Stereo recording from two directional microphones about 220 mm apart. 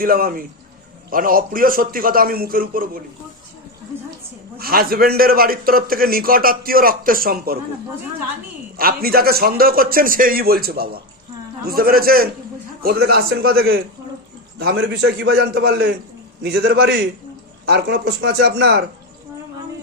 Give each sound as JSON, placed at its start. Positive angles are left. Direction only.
{"t": 0.0, "sound": "a man's voice", "side_deg": -40}
{"t": 4.5, "sound": "a man's voice", "side_deg": -45}
{"t": 8.8, "sound": "a man's voice", "side_deg": -45}